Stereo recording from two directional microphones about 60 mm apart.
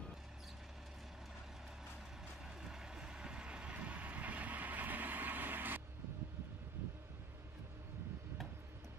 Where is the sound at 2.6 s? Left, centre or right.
Centre; by 5.8 s right.